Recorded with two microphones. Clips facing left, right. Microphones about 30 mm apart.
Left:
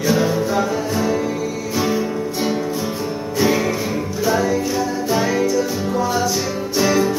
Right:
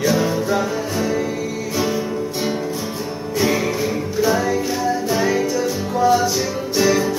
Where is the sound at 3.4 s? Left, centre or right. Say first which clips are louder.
Left 1 dB; centre.